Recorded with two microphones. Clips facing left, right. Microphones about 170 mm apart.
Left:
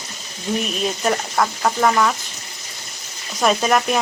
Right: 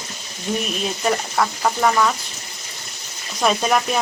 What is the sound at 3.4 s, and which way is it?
Speech, centre (ahead or behind).